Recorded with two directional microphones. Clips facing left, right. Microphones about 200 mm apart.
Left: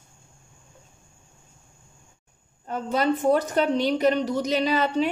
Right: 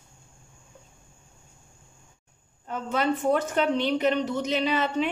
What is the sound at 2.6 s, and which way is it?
A woman's voice, 40° left (ahead or behind).